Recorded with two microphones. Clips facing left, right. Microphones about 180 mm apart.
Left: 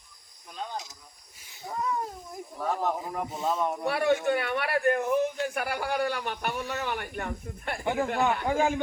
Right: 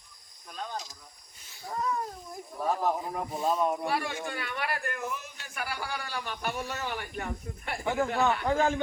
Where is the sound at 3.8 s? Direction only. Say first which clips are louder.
Left 7 dB; 60° left (ahead or behind).